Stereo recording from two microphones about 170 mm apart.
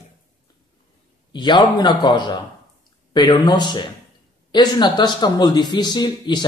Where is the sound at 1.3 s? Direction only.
25° left (ahead or behind).